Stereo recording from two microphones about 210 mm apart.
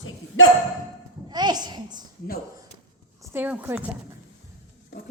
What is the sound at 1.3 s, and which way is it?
Speech, 20° right (ahead or behind).